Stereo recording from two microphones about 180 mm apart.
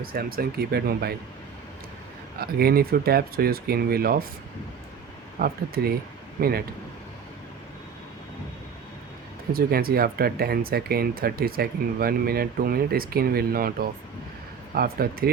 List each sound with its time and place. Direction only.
0.0 s speech: 55° right (ahead or behind)
2.4 s speech: 60° right (ahead or behind)
5.4 s speech: 55° right (ahead or behind)
9.5 s speech: 55° right (ahead or behind)